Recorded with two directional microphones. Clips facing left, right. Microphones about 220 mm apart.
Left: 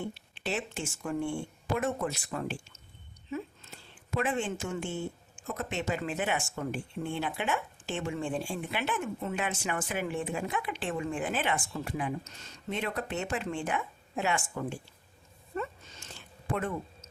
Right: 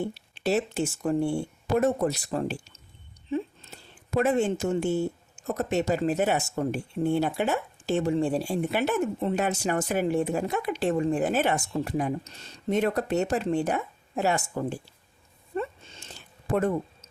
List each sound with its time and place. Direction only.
0.0 s a woman's voice: 40° right (ahead or behind)
15.5 s a sound: 30° right (ahead or behind)
16.5 s speech: 40° right (ahead or behind)